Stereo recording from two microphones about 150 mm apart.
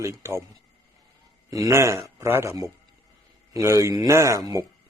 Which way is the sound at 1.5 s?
20° right (ahead or behind).